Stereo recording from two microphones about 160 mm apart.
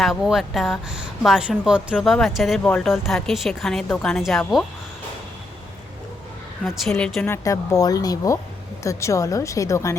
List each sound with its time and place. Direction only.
0.0 s a woman's voice: centre (ahead or behind)
6.7 s a woman's voice: 5° left (ahead or behind)
7.4 s speech: 20° left (ahead or behind)